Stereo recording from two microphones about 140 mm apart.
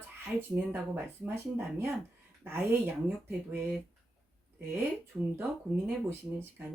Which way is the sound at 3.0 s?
15° right (ahead or behind).